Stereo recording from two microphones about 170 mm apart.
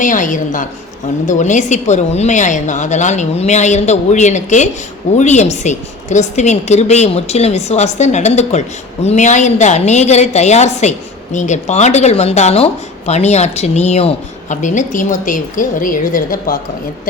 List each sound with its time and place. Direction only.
0.0 s a woman's voice: 50° left (ahead or behind)